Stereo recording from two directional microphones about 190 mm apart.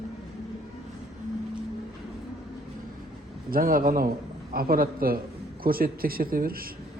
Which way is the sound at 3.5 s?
50° right (ahead or behind).